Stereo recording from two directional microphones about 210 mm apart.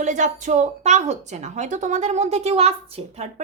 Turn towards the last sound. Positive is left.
turn(degrees=-30)  # may be behind; listen again after turning